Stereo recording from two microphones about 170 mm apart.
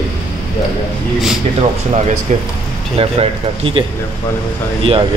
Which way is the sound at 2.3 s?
45° right (ahead or behind).